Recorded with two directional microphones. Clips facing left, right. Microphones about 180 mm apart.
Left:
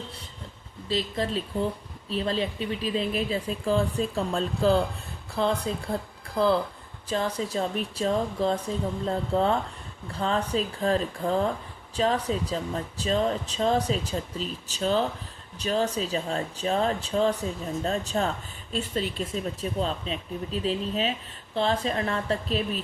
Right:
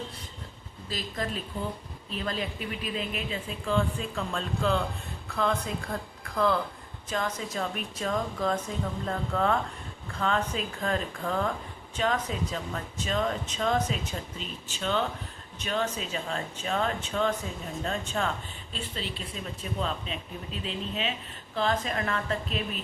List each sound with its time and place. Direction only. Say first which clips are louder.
0.9 s speech: left 6 dB; 30° left (ahead or behind); by 19.4 s 45° left (ahead or behind)
19.8 s speech: left 2 dB; 35° left (ahead or behind)